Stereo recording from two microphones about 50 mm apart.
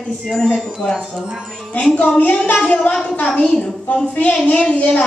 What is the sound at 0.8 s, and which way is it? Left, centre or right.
A woman's voice, left.